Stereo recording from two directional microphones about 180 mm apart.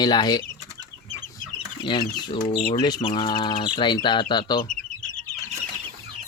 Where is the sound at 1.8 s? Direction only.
25° left (ahead or behind).